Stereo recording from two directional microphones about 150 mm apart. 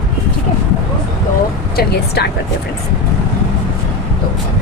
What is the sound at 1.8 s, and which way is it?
Speech, 90° left.